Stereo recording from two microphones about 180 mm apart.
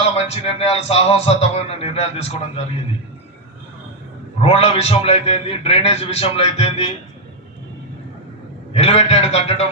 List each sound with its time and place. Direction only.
0.0 s a man's voice: 35° left (ahead or behind)
4.4 s a man's voice: 35° left (ahead or behind)
8.7 s a man's voice: 35° left (ahead or behind)